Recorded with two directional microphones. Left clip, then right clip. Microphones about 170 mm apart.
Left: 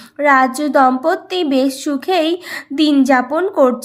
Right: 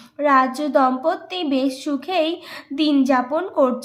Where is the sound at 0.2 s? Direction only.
35° left (ahead or behind).